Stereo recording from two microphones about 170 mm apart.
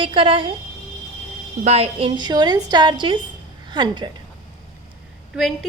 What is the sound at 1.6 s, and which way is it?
A woman's voice, 35° right (ahead or behind).